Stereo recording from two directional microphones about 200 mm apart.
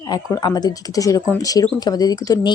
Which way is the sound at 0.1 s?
20° left (ahead or behind).